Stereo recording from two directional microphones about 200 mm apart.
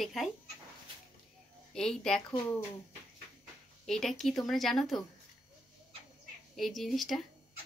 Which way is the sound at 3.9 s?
Centre (ahead or behind).